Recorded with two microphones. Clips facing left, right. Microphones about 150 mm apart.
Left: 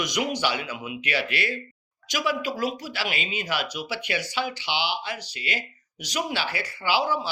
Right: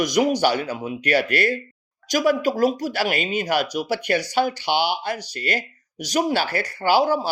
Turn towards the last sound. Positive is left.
turn(degrees=-45)  # may be behind; listen again after turning